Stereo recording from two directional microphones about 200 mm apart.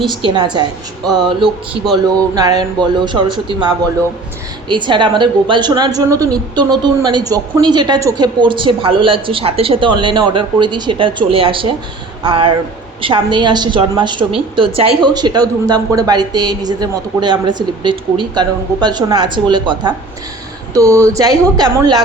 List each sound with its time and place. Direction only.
0.0 s a woman's voice: 25° right (ahead or behind)
1.8 s a man's voice: centre (ahead or behind)
2.3 s a woman's voice: 20° right (ahead or behind)
4.7 s a woman's voice: 25° right (ahead or behind)